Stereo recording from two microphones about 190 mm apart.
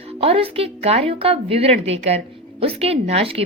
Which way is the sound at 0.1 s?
30° right (ahead or behind).